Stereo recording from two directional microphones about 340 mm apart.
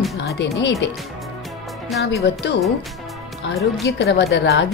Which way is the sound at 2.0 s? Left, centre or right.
Left.